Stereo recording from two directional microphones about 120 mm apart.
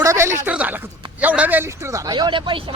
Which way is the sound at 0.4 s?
15° right (ahead or behind).